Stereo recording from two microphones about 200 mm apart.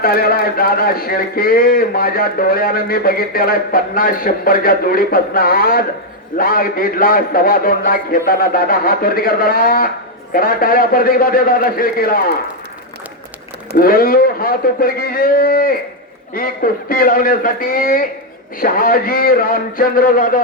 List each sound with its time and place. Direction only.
0.0 s a man's voice: 50° left (ahead or behind)
13.7 s a man's voice: 45° left (ahead or behind)